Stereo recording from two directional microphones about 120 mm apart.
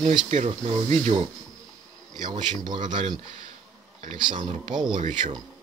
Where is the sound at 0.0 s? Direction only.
40° right (ahead or behind).